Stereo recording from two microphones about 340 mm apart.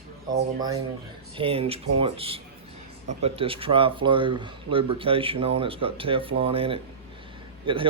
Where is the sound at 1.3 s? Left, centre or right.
Centre.